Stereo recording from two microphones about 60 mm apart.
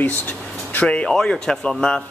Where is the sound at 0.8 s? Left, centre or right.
Centre.